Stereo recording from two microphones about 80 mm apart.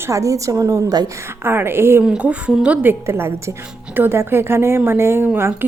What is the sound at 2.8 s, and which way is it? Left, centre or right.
A woman's voice, right.